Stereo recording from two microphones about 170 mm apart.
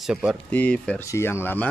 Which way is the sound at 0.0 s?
5° right (ahead or behind).